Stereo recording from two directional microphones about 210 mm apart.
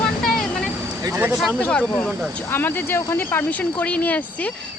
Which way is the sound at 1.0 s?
10° right (ahead or behind).